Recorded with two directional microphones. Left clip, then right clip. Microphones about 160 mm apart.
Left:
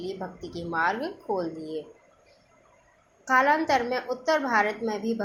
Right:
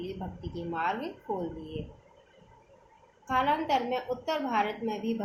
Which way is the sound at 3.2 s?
25° left (ahead or behind).